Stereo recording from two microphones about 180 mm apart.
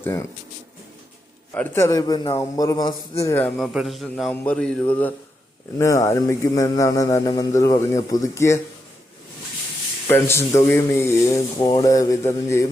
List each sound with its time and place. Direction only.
0.0 s speech: 15° left (ahead or behind)
1.5 s speech: 15° left (ahead or behind)
3.6 s a man's voice: centre (ahead or behind); by 8.6 s 15° left (ahead or behind)
10.1 s speech: 15° left (ahead or behind)